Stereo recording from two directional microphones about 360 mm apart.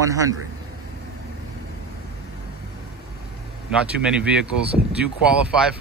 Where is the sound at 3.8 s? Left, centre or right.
Centre.